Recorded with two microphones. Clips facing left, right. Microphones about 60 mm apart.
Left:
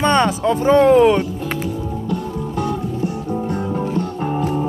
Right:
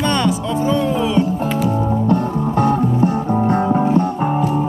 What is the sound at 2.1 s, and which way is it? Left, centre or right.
Music, right.